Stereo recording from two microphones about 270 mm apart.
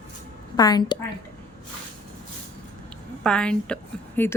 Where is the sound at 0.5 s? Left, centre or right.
Centre.